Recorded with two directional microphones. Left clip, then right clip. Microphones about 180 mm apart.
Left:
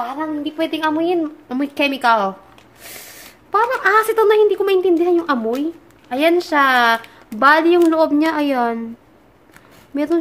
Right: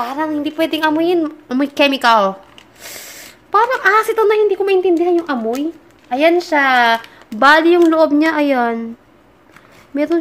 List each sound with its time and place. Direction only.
0.0 s a woman's voice: 40° right (ahead or behind); by 2.3 s 20° right (ahead or behind)
3.5 s a woman's voice: 10° right (ahead or behind)
9.9 s a woman's voice: 5° right (ahead or behind)